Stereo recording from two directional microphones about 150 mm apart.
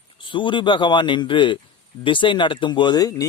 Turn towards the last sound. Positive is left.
turn(degrees=25)  # may be behind; listen again after turning